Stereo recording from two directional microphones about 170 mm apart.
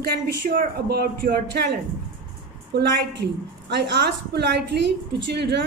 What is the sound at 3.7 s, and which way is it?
Speech, 90° right.